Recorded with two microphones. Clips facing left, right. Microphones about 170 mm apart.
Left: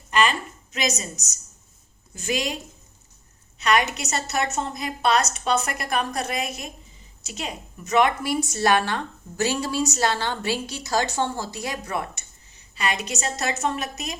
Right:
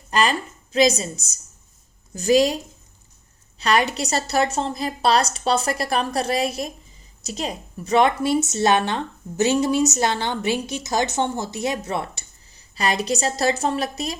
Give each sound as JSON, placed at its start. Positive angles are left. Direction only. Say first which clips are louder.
{"t": 0.1, "sound": "a woman's voice", "louder": "right 1 dB", "side_deg": -35}
{"t": 3.6, "sound": "a woman's voice", "louder": "right 2 dB", "side_deg": -30}